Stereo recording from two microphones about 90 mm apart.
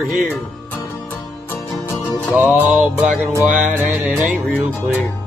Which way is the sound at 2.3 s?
20° right (ahead or behind).